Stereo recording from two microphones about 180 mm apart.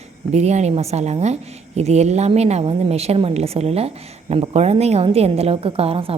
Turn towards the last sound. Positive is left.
turn(degrees=-30)  # may be behind; listen again after turning